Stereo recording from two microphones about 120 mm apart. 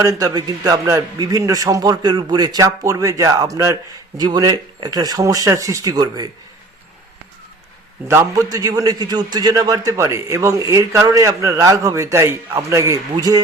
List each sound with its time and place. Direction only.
0.0 s a man's voice: 30° right (ahead or behind)
8.0 s a man's voice: 20° right (ahead or behind)